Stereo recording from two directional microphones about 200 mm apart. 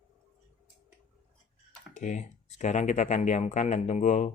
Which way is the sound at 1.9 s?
40° left (ahead or behind).